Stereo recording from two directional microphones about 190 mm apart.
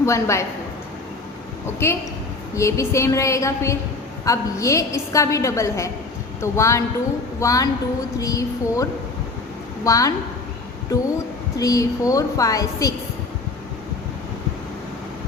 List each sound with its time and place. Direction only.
0.0 s a woman's voice: 15° left (ahead or behind)
1.8 s a woman's voice: 15° left (ahead or behind)
11.5 s a woman's voice: 20° left (ahead or behind)